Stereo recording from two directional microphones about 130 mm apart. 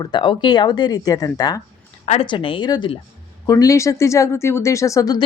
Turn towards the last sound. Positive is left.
turn(degrees=25)  # may be behind; listen again after turning